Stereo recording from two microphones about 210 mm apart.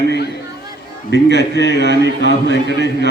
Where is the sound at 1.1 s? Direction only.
55° left (ahead or behind).